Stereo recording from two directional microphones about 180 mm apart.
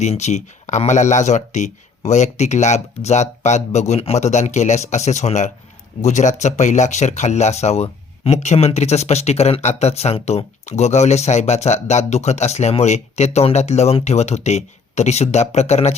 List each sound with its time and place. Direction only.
0.0 s speech: 40° left (ahead or behind)